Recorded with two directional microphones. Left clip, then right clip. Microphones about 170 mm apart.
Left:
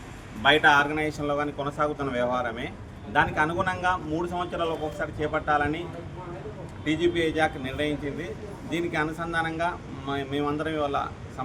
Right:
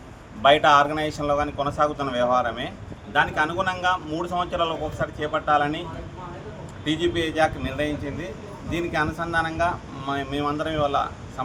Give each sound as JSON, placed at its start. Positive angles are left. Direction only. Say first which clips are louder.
{"t": 0.4, "sound": "speech", "louder": "right 3 dB", "side_deg": -25}
{"t": 0.9, "sound": "speech", "louder": "right 3 dB", "side_deg": -10}
{"t": 6.8, "sound": "speech", "louder": "right 1 dB", "side_deg": -10}